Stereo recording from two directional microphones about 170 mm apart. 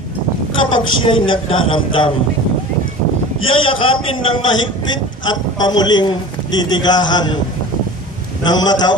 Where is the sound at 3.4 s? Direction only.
30° left (ahead or behind).